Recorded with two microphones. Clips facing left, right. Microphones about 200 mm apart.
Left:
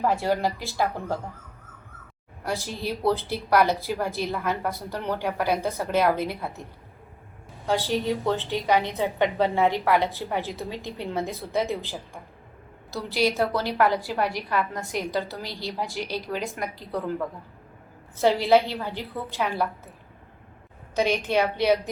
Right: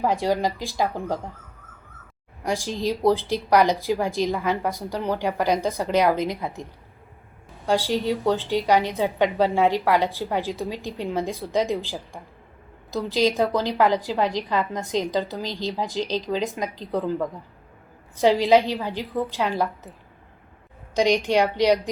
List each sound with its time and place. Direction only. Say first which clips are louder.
0.0 s a woman's voice: right 1 dB; 15° right (ahead or behind)
2.4 s a woman's voice: right 4 dB; 15° right (ahead or behind)
7.7 s a woman's voice: right 2 dB; 10° right (ahead or behind)
20.9 s a woman's voice: right 3 dB; 15° right (ahead or behind)